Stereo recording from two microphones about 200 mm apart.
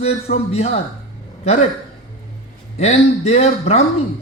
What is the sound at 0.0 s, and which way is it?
Speech, 30° left (ahead or behind).